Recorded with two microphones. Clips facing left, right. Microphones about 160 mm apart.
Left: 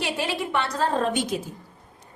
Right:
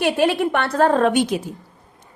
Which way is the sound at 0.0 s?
60° right (ahead or behind).